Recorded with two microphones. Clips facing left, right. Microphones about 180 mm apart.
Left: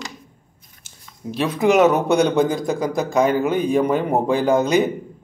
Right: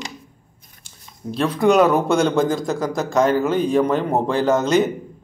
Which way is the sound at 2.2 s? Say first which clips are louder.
Left 1 dB; 15° left (ahead or behind).